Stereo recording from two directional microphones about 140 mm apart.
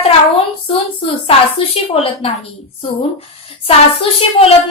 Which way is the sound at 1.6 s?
40° left (ahead or behind).